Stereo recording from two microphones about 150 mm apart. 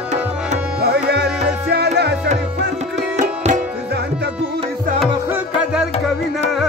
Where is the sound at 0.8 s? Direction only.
90° right.